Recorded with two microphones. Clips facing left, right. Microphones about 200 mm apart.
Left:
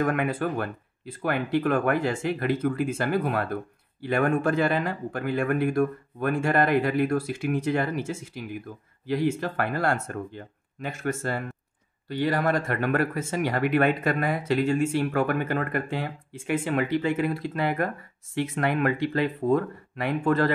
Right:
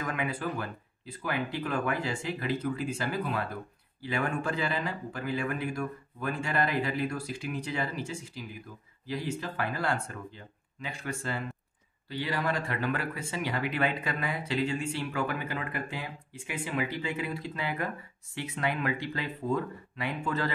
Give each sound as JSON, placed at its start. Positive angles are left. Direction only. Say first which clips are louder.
{"t": 0.0, "sound": "speech", "louder": "left 8 dB", "side_deg": 55}
{"t": 9.0, "sound": "speech", "louder": "left 9 dB", "side_deg": 50}